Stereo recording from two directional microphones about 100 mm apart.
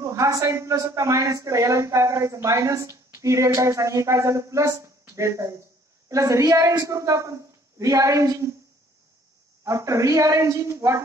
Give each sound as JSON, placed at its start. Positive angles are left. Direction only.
{"t": 0.0, "sound": "speech", "side_deg": -35}
{"t": 9.6, "sound": "speech", "side_deg": -30}